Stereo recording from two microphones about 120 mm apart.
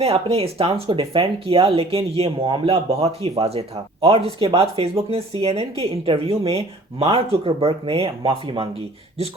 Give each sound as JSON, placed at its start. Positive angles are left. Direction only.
{"t": 0.0, "sound": "speech", "side_deg": -55}